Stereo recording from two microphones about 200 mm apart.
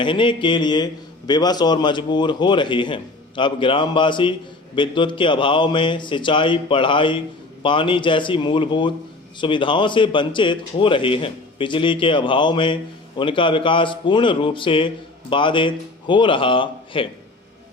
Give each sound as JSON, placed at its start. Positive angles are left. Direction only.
{"t": 0.0, "sound": "a man's voice", "side_deg": 25}